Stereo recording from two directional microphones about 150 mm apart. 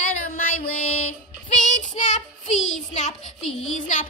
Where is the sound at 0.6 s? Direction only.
45° left (ahead or behind).